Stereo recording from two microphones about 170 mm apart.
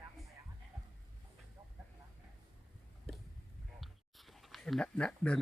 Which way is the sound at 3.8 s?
Centre (ahead or behind).